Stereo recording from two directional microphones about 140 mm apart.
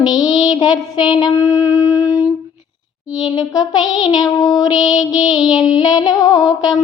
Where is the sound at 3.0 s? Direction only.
30° left (ahead or behind).